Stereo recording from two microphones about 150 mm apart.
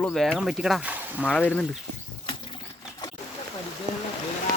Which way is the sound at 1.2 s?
10° left (ahead or behind).